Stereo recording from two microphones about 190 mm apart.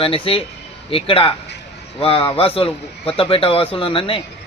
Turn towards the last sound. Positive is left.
turn(degrees=30)  # may be behind; listen again after turning